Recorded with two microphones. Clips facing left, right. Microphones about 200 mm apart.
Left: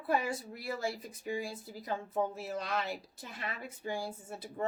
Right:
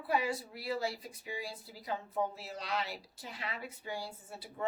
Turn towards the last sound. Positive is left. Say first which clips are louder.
# left 2 dB
turn(degrees=50)  # may be behind; listen again after turning